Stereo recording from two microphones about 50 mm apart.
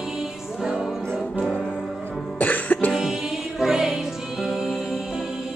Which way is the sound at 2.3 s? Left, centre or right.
Left.